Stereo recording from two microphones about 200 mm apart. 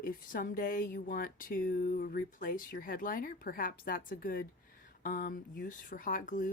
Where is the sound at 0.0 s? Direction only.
45° left (ahead or behind).